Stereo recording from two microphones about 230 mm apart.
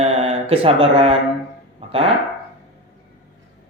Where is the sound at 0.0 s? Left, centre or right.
Right.